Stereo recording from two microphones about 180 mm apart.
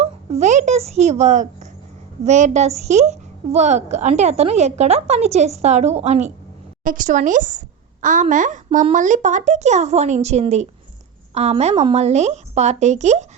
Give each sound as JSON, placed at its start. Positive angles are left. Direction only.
{"t": 0.0, "sound": "a child's voice", "side_deg": -35}